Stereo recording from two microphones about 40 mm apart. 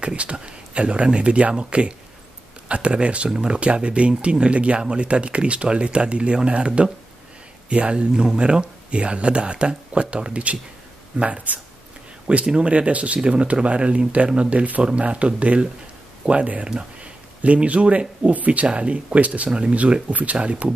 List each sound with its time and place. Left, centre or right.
0.0 s speech: right